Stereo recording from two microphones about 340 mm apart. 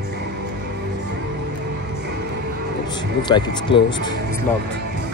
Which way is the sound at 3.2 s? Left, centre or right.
Centre.